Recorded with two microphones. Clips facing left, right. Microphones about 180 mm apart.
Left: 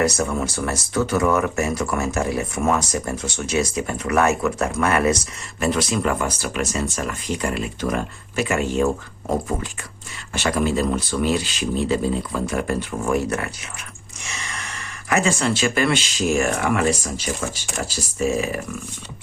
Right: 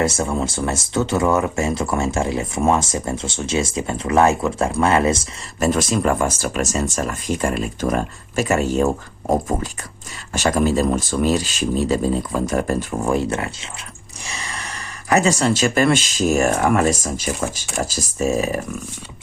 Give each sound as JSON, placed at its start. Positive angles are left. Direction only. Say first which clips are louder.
{"t": 0.0, "sound": "speech", "louder": "right 1 dB", "side_deg": -25}
{"t": 5.5, "sound": "speech", "louder": "right 3 dB", "side_deg": -40}
{"t": 10.3, "sound": "speech", "louder": "right 3 dB", "side_deg": -40}
{"t": 13.1, "sound": "speech", "louder": "right 1 dB", "side_deg": -25}